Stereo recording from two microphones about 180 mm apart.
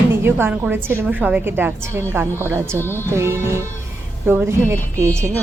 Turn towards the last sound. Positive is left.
turn(degrees=-15)  # may be behind; listen again after turning